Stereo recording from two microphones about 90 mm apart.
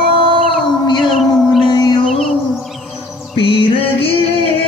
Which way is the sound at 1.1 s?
Centre (ahead or behind).